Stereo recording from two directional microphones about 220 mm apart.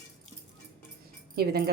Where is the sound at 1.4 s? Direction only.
45° right (ahead or behind).